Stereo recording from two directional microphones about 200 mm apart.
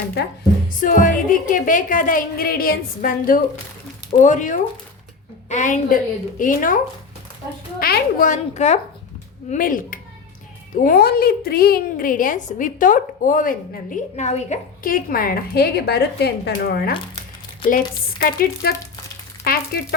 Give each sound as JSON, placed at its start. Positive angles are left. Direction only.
{"t": 0.7, "sound": "a woman's voice", "side_deg": 45}
{"t": 7.8, "sound": "a woman's voice", "side_deg": 50}